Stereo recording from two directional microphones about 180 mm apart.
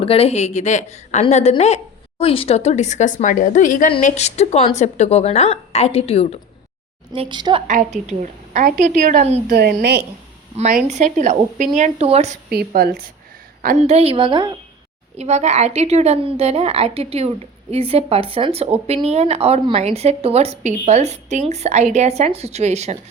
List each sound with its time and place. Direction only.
0.0 s a woman's voice: 35° left (ahead or behind)
7.1 s a woman's voice: 25° right (ahead or behind)
7.7 s a woman's voice: 45° right (ahead or behind)
9.5 s a woman's voice: 65° right (ahead or behind)
10.6 s a woman's voice: 40° right (ahead or behind)
12.5 s a woman's voice: 60° right (ahead or behind)
13.8 s a woman's voice: 35° right (ahead or behind)
15.2 s a woman's voice: 40° right (ahead or behind)